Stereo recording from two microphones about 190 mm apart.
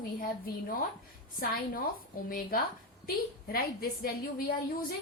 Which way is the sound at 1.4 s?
50° left (ahead or behind).